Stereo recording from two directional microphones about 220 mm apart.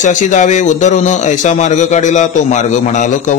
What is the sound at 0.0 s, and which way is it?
Speech, 35° left (ahead or behind).